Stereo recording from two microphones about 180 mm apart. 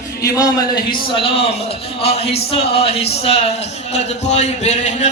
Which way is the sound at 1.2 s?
30° left (ahead or behind).